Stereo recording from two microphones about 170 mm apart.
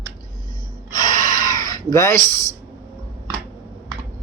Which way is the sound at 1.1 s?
50° right (ahead or behind).